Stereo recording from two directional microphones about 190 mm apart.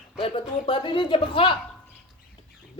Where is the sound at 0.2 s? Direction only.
30° left (ahead or behind).